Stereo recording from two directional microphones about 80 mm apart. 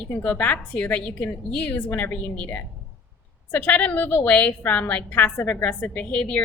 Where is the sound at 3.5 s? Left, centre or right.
Left.